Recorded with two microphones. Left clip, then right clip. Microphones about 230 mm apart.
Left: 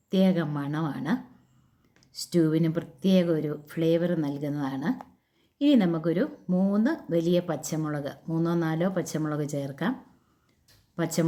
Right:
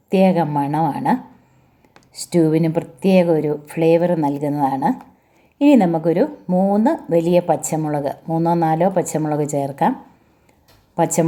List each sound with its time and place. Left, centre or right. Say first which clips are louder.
0.1 s a woman's voice: right 11 dB; centre
2.4 s a woman's voice: right 9 dB; centre